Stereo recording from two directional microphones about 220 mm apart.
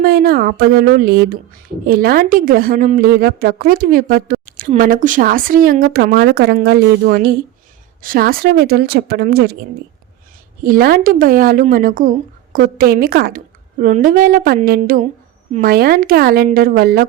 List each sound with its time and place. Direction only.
0.0 s speech: 45° right (ahead or behind)
10.6 s speech: 40° right (ahead or behind)